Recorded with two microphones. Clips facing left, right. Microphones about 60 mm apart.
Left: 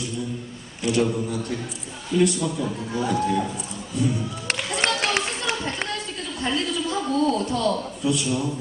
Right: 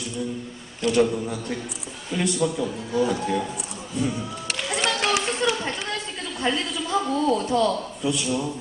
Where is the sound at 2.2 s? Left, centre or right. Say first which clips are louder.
Left 3 dB; right.